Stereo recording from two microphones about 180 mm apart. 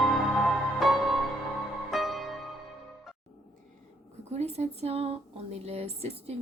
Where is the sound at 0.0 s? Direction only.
Centre (ahead or behind).